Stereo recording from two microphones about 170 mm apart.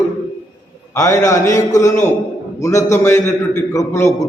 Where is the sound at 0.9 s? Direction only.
20° left (ahead or behind).